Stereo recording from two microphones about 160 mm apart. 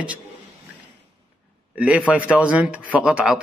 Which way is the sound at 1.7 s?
5° right (ahead or behind).